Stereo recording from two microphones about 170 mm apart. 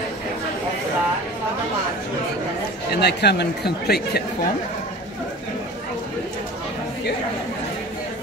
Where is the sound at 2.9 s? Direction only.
75° left (ahead or behind).